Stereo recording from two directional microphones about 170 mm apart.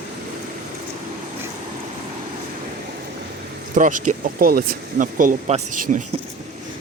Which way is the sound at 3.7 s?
50° right (ahead or behind).